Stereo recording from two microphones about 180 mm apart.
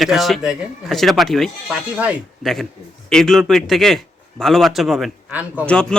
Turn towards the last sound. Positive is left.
turn(degrees=-5)  # may be behind; listen again after turning